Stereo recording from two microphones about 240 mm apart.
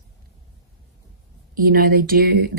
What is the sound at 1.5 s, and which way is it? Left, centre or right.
Speech, right.